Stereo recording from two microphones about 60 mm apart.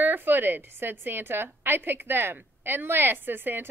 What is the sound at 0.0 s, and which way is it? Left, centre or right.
A woman's voice, right.